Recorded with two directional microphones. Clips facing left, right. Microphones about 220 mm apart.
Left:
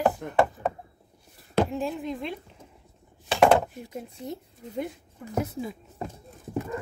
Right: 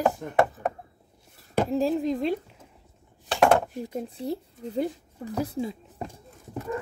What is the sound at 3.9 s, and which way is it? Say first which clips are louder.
Speech: right 6 dB; 30° right (ahead or behind).